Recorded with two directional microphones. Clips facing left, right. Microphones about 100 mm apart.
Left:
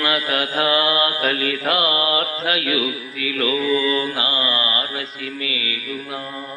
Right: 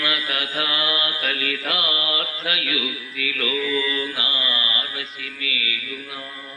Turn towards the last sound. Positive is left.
turn(degrees=35)  # may be behind; listen again after turning